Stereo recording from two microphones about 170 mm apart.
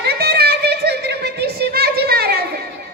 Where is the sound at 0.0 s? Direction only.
70° right (ahead or behind).